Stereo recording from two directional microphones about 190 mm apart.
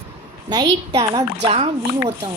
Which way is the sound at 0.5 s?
25° right (ahead or behind).